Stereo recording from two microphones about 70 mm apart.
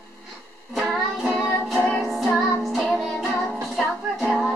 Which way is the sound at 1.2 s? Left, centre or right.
Centre.